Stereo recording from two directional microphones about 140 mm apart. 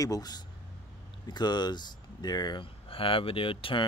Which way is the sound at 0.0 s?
25° left (ahead or behind).